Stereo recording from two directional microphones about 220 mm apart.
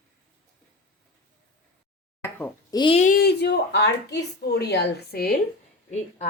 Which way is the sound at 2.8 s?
25° left (ahead or behind).